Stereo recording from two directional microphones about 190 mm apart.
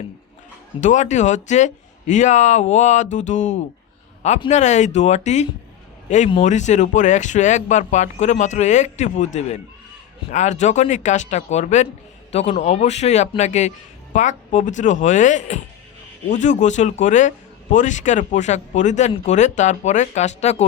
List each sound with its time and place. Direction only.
0.8 s speech: 40° left (ahead or behind)